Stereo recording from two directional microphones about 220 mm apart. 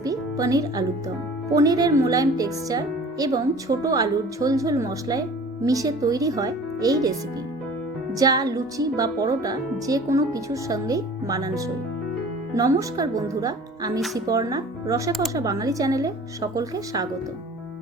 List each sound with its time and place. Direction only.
0.0 s music: 15° right (ahead or behind)
1.5 s speech: 15° right (ahead or behind)
8.2 s speech: 15° right (ahead or behind)